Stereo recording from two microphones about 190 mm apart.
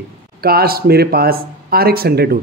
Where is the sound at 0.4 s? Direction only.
55° right (ahead or behind).